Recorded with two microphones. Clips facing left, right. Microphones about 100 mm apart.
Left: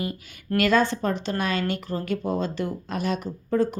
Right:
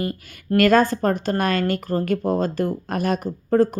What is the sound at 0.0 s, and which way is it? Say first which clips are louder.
Speech: right 4 dB; 45° right (ahead or behind).